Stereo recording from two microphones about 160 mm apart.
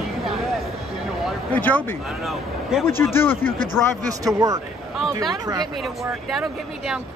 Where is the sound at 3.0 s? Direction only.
15° left (ahead or behind).